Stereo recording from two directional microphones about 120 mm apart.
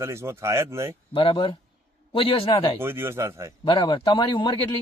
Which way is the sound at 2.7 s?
20° right (ahead or behind).